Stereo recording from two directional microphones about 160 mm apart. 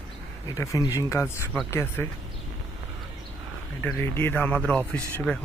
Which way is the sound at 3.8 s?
15° left (ahead or behind).